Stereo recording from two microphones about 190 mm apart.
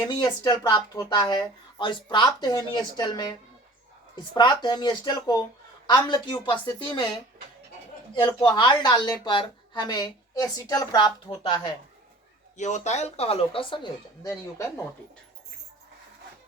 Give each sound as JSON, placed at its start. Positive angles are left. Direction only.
{"t": 0.1, "sound": "speech", "side_deg": 20}
{"t": 8.1, "sound": "speech", "side_deg": 25}
{"t": 12.5, "sound": "speech", "side_deg": 40}